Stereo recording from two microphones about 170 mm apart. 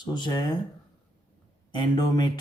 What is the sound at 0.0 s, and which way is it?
Speech, 25° left (ahead or behind).